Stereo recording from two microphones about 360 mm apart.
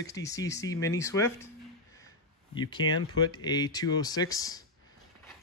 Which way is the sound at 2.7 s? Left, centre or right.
Centre.